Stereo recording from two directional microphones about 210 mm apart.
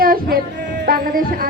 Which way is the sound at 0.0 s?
45° right (ahead or behind).